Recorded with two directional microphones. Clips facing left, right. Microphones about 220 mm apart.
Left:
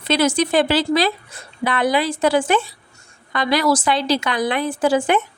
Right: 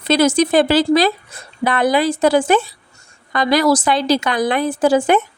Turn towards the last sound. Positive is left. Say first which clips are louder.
# right 3 dB
turn(degrees=-40)  # may be behind; listen again after turning